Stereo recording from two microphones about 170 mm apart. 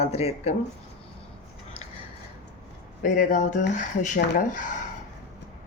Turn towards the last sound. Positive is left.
turn(degrees=50)  # may be behind; listen again after turning